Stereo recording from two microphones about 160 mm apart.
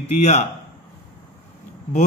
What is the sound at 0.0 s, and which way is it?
Speech, 40° left (ahead or behind).